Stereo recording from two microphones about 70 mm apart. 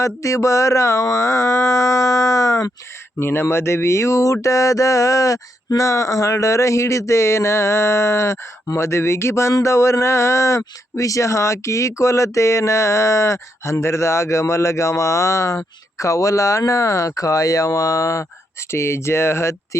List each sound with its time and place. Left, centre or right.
0.0 s speech: left
3.2 s speech: left